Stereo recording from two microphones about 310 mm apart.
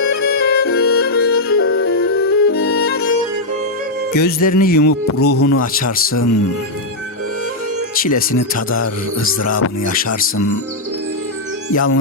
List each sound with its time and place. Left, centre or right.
0.3 s music: left
4.4 s speech: left
4.9 s speech: left
7.9 s speech: left
9.4 s speech: left
11.7 s speech: left